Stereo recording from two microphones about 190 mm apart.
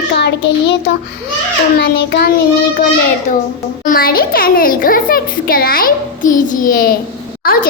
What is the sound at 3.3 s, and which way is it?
A child's voice, 45° left (ahead or behind).